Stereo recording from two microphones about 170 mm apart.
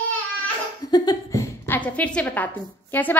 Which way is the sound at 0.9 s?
25° left (ahead or behind).